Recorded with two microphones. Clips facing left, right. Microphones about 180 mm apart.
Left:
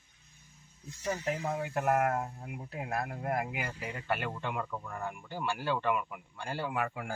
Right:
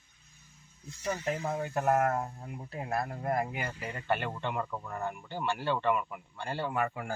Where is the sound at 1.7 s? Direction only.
30° right (ahead or behind).